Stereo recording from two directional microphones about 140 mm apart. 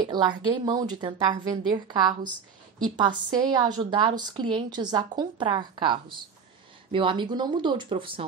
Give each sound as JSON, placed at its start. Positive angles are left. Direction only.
{"t": 0.0, "sound": "a woman's voice", "side_deg": -30}